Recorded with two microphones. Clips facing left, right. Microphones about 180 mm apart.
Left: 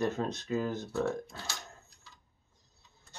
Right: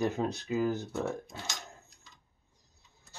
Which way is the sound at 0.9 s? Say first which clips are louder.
Left 2 dB; 20° right (ahead or behind).